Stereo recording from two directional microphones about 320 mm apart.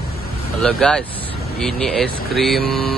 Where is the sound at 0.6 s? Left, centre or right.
Centre.